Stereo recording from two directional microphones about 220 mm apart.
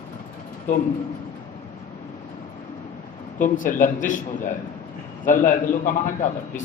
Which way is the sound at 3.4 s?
35° left (ahead or behind).